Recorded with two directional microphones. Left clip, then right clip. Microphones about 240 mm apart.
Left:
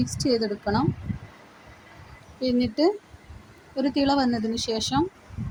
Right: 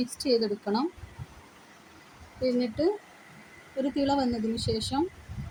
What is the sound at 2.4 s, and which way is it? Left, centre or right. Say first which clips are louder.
A woman's voice: left 4 dB; centre.